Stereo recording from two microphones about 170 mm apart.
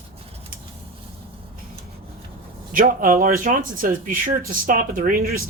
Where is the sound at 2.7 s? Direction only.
60° right (ahead or behind).